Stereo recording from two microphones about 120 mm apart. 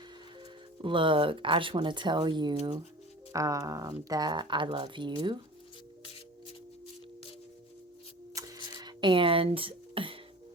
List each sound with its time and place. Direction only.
0.3 s speech: 45° right (ahead or behind)
3.3 s speech: 25° right (ahead or behind)
8.4 s a sound: 30° right (ahead or behind); by 10.2 s 45° right (ahead or behind)